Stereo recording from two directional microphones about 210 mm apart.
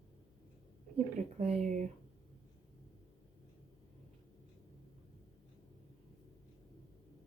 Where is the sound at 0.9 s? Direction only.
30° right (ahead or behind).